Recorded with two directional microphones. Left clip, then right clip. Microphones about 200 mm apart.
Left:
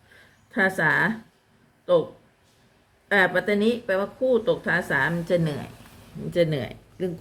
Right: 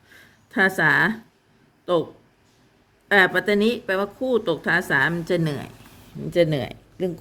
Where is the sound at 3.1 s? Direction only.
50° right (ahead or behind).